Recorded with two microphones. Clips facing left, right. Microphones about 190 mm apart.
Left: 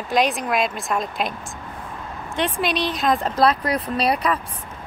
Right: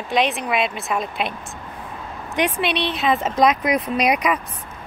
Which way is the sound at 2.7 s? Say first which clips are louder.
Even; 40° left (ahead or behind).